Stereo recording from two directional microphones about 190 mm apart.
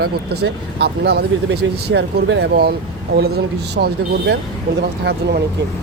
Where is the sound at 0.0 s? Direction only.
55° right (ahead or behind).